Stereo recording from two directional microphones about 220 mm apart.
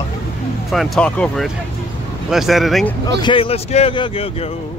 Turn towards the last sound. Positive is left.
turn(degrees=25)  # may be behind; listen again after turning